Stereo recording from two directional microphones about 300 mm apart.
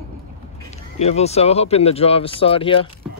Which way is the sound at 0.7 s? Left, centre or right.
Left.